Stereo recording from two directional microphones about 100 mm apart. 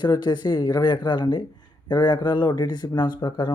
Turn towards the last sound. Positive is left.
turn(degrees=50)  # may be behind; listen again after turning